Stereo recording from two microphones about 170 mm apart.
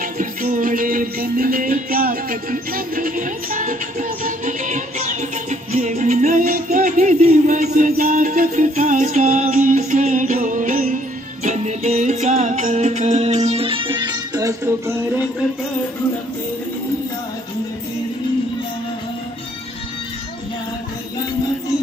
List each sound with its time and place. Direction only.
0.0 s music: 50° right (ahead or behind); by 14.5 s 25° right (ahead or behind)